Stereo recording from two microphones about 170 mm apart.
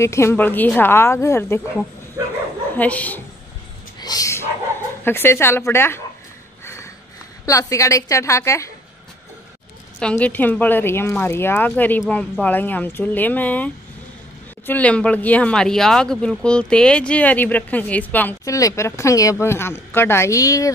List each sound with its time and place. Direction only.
0.0 s speech: 15° left (ahead or behind)
2.2 s bow-wow: 20° right (ahead or behind)
2.8 s speech: 10° left (ahead or behind)
4.0 s dog: 20° left (ahead or behind)
5.0 s speech: 15° left (ahead or behind)
6.6 s a sound: 15° left (ahead or behind)
7.4 s speech: 20° left (ahead or behind)
9.9 s speech: 5° left (ahead or behind)
14.7 s speech: 10° left (ahead or behind)